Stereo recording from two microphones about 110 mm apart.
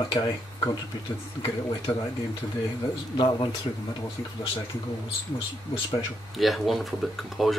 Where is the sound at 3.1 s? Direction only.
45° left (ahead or behind).